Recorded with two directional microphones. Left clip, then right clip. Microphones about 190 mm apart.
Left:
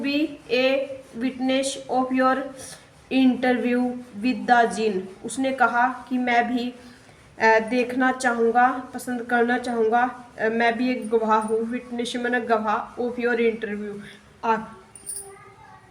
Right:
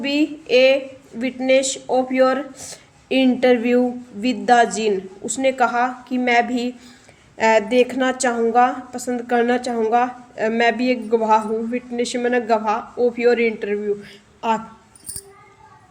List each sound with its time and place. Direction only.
0.0 s a woman's voice: 40° right (ahead or behind)